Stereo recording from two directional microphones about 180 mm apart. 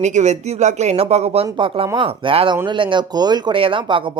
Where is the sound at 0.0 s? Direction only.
40° right (ahead or behind).